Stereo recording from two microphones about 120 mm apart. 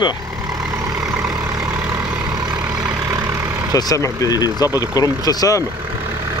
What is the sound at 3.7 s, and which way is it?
Speech, 30° left (ahead or behind).